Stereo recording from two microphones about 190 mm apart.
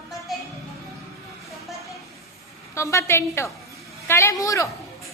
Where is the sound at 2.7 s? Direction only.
15° left (ahead or behind).